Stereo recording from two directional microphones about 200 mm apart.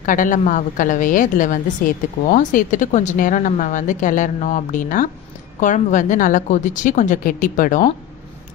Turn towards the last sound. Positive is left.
turn(degrees=40)  # may be behind; listen again after turning